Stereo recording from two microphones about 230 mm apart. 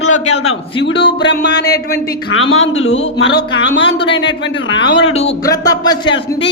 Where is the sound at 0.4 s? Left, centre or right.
Left.